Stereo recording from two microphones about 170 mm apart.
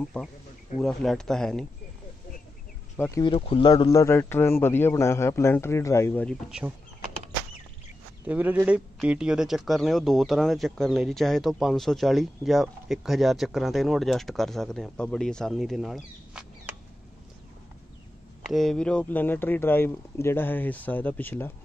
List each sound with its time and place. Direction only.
0.2 s a man's voice: 5° left (ahead or behind)
3.1 s a man's voice: 25° left (ahead or behind)
8.3 s a man's voice: 10° right (ahead or behind)
18.5 s a man's voice: centre (ahead or behind)